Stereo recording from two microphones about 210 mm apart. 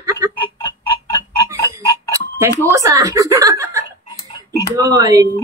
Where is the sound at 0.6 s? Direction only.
15° left (ahead or behind).